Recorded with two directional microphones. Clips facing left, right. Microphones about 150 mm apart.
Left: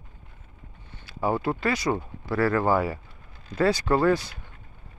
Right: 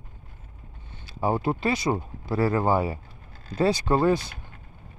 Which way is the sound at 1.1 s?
25° right (ahead or behind).